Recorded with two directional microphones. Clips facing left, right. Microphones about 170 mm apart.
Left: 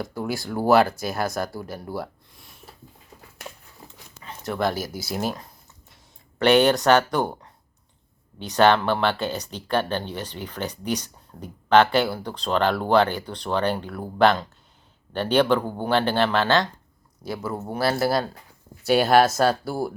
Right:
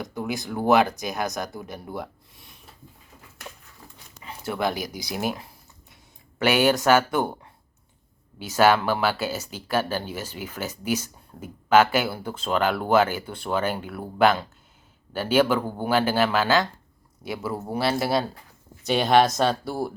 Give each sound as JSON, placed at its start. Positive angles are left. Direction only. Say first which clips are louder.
{"t": 0.4, "sound": "speech", "louder": "left 2 dB", "side_deg": 5}
{"t": 3.8, "sound": "a sound", "louder": "left 2 dB", "side_deg": 20}
{"t": 4.2, "sound": "a sound", "louder": "left 1 dB", "side_deg": -15}
{"t": 4.9, "sound": "speech", "louder": "left 1 dB", "side_deg": 5}
{"t": 8.4, "sound": "speech", "louder": "left 1 dB", "side_deg": -5}
{"t": 17.2, "sound": "speech", "louder": "left 1 dB", "side_deg": -20}
{"t": 17.5, "sound": "speech", "louder": "left 1 dB", "side_deg": 0}